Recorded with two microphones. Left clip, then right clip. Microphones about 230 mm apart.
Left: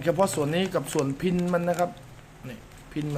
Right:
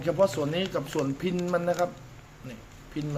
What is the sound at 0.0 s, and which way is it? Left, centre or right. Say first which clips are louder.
Speech: left 1 dB; centre.